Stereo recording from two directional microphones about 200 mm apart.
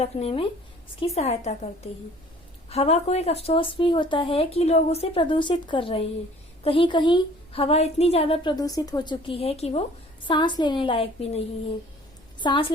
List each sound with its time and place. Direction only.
0.0 s a woman's voice: 30° left (ahead or behind)